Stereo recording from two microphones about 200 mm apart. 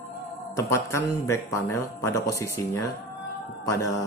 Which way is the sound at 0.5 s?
15° left (ahead or behind).